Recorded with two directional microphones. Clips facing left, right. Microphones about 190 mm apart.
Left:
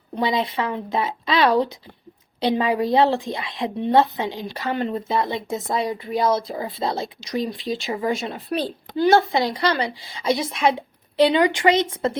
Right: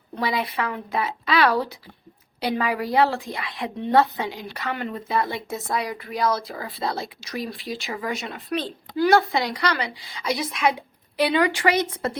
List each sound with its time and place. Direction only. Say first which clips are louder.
0.2 s a woman's voice: left 3 dB; 20° left (ahead or behind)